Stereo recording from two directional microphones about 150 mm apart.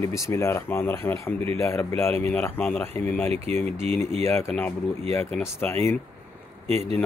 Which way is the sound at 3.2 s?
45° right (ahead or behind).